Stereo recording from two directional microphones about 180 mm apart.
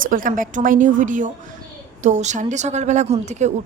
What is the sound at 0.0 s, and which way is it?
A woman's voice, 50° right (ahead or behind).